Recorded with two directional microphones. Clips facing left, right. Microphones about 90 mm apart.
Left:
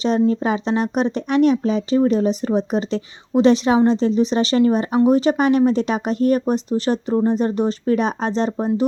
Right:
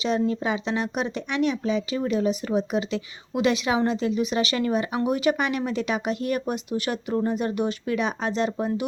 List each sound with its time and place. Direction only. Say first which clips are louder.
0.0 s speech: left 6 dB; 40° left (ahead or behind)